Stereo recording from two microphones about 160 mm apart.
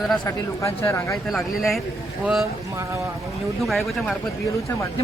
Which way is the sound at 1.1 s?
Centre (ahead or behind).